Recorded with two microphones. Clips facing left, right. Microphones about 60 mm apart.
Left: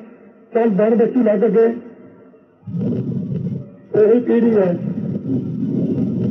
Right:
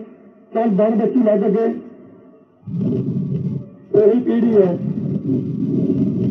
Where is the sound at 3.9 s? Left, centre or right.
Left.